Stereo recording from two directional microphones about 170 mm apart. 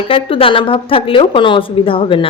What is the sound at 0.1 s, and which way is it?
A woman's voice, 30° left (ahead or behind).